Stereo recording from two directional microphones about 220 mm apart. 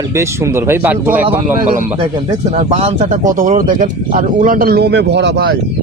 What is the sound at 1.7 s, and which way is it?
Speech, 30° right (ahead or behind).